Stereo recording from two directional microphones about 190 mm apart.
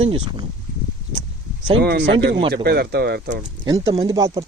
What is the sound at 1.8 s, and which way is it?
Speech, 60° right (ahead or behind).